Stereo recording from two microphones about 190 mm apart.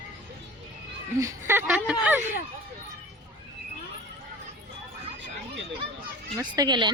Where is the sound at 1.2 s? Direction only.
10° right (ahead or behind).